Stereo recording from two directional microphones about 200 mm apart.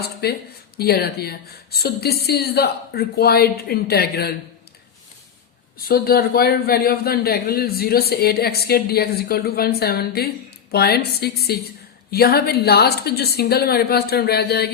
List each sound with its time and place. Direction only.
0.0 s a sound: 55° left (ahead or behind)
0.8 s speech: 50° left (ahead or behind)
5.7 s speech: 45° left (ahead or behind)